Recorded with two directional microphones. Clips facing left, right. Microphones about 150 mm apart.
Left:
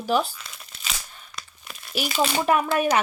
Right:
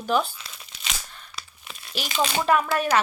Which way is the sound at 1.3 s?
10° left (ahead or behind).